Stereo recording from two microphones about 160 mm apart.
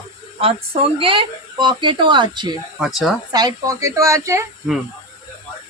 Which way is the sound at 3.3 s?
25° right (ahead or behind).